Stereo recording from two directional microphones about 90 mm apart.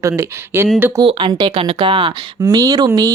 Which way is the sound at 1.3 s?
55° right (ahead or behind).